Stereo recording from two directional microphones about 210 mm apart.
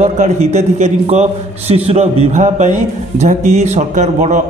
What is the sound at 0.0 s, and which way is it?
A man's voice, 30° right (ahead or behind).